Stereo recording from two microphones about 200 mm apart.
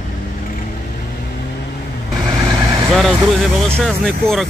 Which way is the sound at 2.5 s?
15° right (ahead or behind).